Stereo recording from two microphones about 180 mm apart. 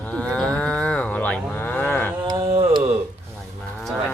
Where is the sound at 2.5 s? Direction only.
35° right (ahead or behind).